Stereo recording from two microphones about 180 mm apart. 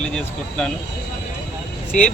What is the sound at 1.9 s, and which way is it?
Speech, 45° left (ahead or behind).